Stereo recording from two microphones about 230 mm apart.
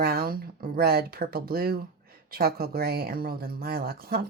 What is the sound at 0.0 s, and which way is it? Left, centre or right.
Speech, right.